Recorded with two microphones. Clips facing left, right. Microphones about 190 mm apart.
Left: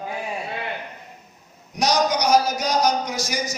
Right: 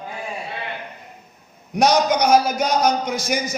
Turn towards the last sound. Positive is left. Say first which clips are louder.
# right 4 dB
turn(degrees=-55)  # may be behind; listen again after turning